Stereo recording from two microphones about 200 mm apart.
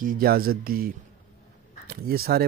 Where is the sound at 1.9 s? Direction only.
50° right (ahead or behind).